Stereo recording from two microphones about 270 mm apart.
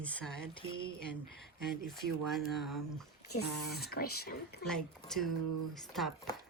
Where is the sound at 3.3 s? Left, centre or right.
Left.